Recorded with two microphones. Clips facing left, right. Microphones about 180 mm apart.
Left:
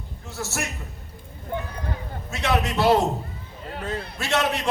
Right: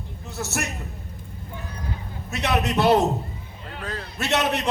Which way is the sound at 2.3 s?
20° right (ahead or behind).